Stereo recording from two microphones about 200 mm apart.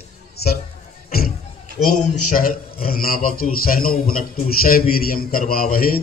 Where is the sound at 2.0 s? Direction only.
45° left (ahead or behind).